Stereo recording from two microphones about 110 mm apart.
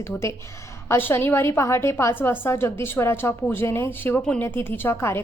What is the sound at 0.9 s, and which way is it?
A woman's voice, 20° left (ahead or behind).